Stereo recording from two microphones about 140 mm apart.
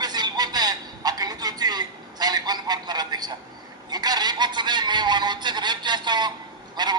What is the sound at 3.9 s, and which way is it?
A man's voice, 30° right (ahead or behind).